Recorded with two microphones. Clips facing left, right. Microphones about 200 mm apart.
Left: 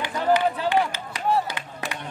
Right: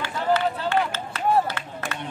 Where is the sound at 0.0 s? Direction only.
15° left (ahead or behind).